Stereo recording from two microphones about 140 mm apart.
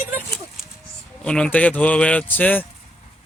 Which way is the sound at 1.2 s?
5° left (ahead or behind).